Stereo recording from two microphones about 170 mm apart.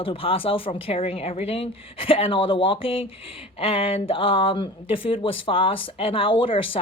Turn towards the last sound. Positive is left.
turn(degrees=30)  # may be behind; listen again after turning